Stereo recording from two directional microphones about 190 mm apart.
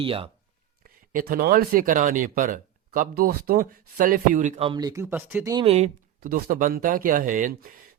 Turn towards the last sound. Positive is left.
turn(degrees=-45)  # may be behind; listen again after turning